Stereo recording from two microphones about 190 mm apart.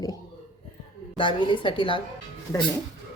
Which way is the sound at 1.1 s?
25° left (ahead or behind).